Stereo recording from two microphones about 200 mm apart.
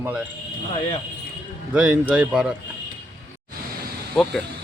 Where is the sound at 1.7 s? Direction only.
5° right (ahead or behind).